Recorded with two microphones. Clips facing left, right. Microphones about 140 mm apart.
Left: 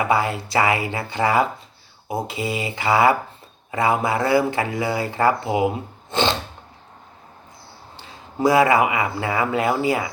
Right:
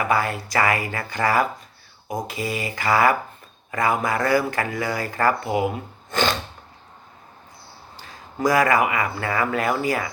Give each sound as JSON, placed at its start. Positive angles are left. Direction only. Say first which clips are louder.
{"t": 0.0, "sound": "speech", "louder": "left 2 dB", "side_deg": 20}
{"t": 7.9, "sound": "speech", "louder": "left 3 dB", "side_deg": 25}